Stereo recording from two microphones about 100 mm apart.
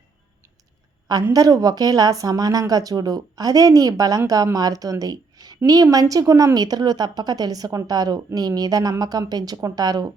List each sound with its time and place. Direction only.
1.3 s a woman's voice: 35° right (ahead or behind)